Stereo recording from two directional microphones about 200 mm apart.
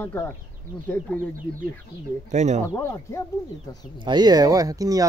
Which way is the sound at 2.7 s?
15° left (ahead or behind).